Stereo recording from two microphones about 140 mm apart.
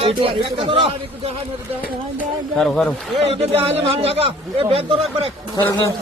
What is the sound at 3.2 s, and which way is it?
A man's voice, 45° right (ahead or behind).